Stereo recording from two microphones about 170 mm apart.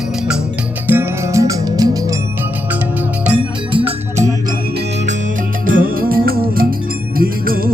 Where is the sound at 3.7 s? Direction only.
35° right (ahead or behind).